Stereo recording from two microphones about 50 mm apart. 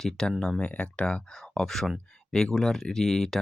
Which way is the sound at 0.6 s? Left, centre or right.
Left.